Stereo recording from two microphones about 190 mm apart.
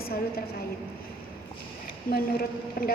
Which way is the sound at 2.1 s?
55° left (ahead or behind).